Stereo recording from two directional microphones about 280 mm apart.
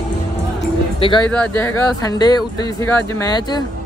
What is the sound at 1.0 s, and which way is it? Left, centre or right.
Speech, centre.